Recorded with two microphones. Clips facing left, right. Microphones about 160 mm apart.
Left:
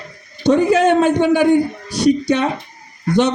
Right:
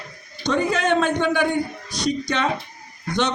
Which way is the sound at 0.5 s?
10° left (ahead or behind).